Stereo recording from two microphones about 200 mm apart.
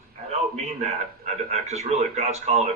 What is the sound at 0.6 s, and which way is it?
A man's voice, 35° right (ahead or behind).